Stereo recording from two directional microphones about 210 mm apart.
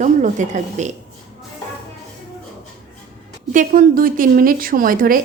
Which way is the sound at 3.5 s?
40° right (ahead or behind).